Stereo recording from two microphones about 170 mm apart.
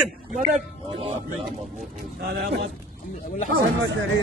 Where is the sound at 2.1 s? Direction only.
75° right (ahead or behind).